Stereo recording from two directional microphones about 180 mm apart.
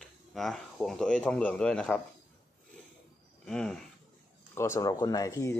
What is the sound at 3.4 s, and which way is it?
Speech, 5° left (ahead or behind).